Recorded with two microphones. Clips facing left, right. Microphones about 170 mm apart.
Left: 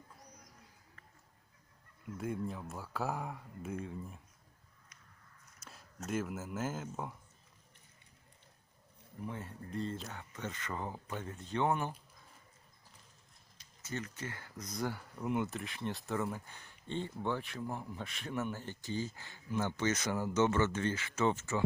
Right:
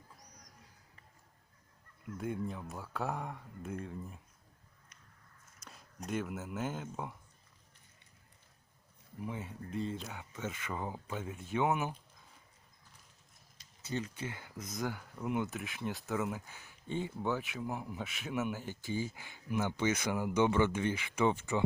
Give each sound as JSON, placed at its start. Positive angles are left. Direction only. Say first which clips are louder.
{"t": 2.1, "sound": "speech", "louder": "even", "side_deg": 0}
{"t": 6.1, "sound": "speech", "louder": "even", "side_deg": 0}
{"t": 9.2, "sound": "speech", "louder": "right 2 dB", "side_deg": -5}
{"t": 13.8, "sound": "speech", "louder": "right 3 dB", "side_deg": -15}
{"t": 14.7, "sound": "speech", "louder": "even", "side_deg": 0}